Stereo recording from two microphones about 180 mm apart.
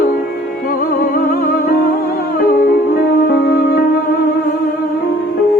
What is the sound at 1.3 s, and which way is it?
Music, 55° left (ahead or behind).